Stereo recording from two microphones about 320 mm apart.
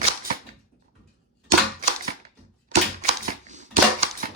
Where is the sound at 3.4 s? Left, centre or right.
Right.